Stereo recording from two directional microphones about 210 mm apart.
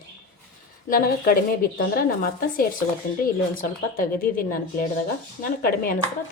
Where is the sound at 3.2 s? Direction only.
40° left (ahead or behind).